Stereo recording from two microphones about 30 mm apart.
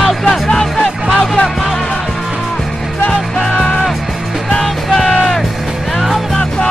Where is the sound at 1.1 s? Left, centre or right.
Left.